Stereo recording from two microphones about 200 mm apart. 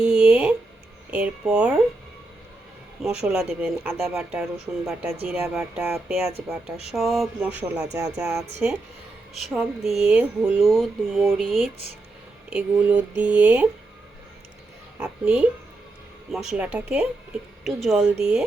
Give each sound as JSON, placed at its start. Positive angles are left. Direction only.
{"t": 0.0, "sound": "a sound", "side_deg": -5}
{"t": 1.1, "sound": "speech", "side_deg": -5}
{"t": 3.0, "sound": "speech", "side_deg": -5}
{"t": 14.9, "sound": "speech", "side_deg": -5}